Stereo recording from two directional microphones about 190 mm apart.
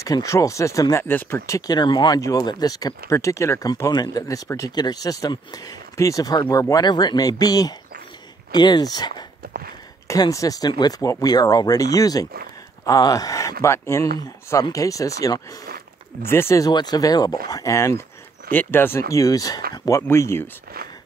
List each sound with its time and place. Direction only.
0.0 s speech: 15° left (ahead or behind)
9.4 s a sound: 50° right (ahead or behind)
10.0 s speech: 15° left (ahead or behind)